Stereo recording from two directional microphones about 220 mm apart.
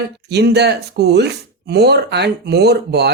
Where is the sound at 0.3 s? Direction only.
50° right (ahead or behind).